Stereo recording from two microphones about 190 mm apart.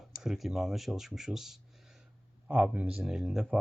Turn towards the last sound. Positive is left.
turn(degrees=0)  # may be behind; listen again after turning